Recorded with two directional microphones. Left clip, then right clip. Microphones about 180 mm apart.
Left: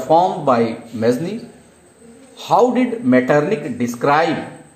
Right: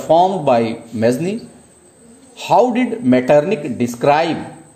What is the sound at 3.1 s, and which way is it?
A man's voice, 45° right (ahead or behind).